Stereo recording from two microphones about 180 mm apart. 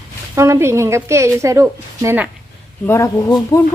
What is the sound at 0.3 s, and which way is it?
A woman's voice, 15° right (ahead or behind).